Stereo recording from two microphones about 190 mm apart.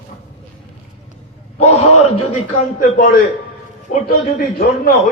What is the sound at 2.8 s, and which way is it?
Speech, 50° left (ahead or behind).